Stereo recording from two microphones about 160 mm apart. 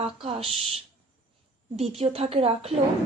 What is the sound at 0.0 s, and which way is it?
Speech, 35° right (ahead or behind).